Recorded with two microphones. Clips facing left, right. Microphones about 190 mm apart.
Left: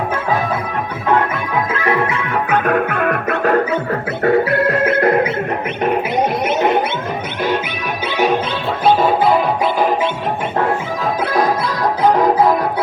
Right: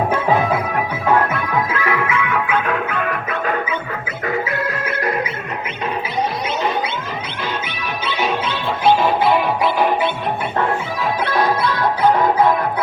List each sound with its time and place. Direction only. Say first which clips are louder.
1.8 s music: left 2 dB; 35° left (ahead or behind)
4.2 s music: left 8 dB; 65° left (ahead or behind)
12.1 s music: left 2 dB; 40° left (ahead or behind)